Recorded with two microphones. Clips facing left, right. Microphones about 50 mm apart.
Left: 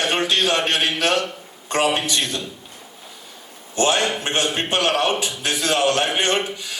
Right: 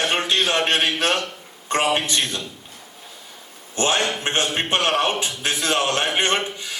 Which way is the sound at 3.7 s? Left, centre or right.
Right.